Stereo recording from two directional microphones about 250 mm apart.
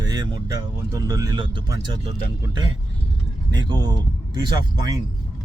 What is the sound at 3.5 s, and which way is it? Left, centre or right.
Speech, centre.